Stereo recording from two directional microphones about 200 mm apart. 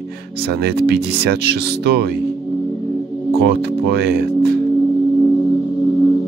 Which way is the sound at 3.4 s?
55° right (ahead or behind).